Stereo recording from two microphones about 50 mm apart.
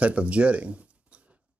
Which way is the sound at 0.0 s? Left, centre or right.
Right.